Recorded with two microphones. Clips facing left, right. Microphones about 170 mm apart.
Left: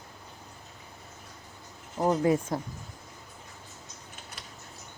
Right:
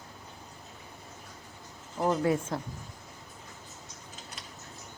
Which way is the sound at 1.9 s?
15° left (ahead or behind).